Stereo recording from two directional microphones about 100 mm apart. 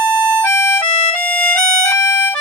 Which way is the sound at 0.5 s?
20° left (ahead or behind).